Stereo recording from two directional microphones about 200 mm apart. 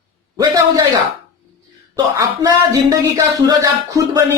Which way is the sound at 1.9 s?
15° right (ahead or behind).